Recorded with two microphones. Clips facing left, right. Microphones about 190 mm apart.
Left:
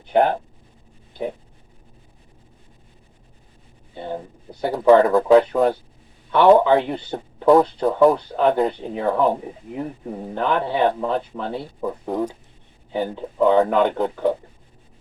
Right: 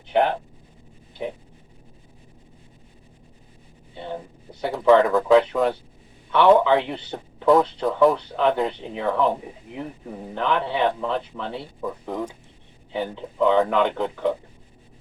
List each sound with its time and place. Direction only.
0.1 s a man's voice: 40° left (ahead or behind)
3.9 s a sound: 40° left (ahead or behind)
4.6 s a man's voice: 40° left (ahead or behind)